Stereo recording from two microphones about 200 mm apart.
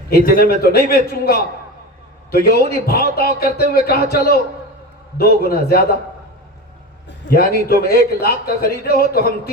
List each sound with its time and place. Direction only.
0.1 s a man's voice: 45° left (ahead or behind)
7.3 s a man's voice: 50° left (ahead or behind)